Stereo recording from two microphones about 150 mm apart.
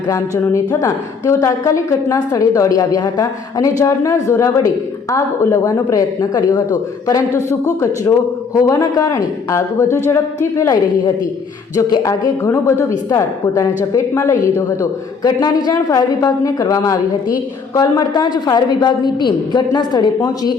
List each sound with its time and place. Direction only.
0.7 s a woman's voice: 20° left (ahead or behind)